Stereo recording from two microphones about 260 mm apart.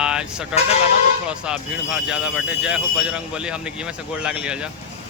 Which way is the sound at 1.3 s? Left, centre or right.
Centre.